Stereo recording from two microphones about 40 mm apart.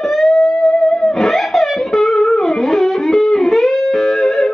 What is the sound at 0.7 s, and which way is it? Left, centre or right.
Music, centre.